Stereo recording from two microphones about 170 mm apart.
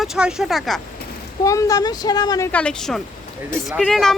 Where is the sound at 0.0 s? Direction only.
5° right (ahead or behind).